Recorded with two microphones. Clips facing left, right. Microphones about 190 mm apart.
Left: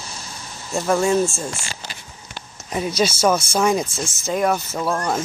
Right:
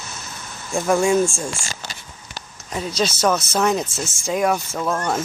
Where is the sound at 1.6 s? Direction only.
40° right (ahead or behind).